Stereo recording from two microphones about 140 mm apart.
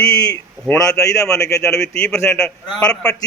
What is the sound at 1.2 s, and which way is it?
A man's voice, 5° left (ahead or behind).